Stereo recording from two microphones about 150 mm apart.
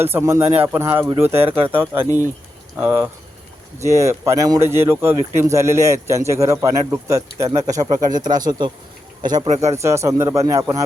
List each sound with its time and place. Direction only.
0.0 s a man's voice: 15° right (ahead or behind)